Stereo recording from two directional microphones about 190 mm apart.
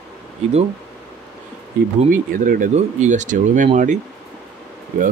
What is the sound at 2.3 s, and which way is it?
Speech, 45° right (ahead or behind).